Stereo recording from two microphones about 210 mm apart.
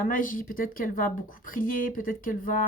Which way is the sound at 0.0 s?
40° left (ahead or behind).